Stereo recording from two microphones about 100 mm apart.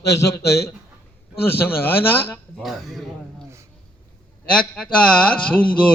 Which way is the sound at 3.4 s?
30° right (ahead or behind).